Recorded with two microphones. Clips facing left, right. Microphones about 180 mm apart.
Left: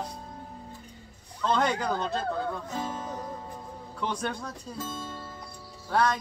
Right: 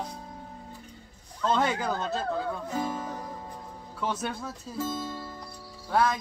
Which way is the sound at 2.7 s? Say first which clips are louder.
Right 2 dB; 10° right (ahead or behind).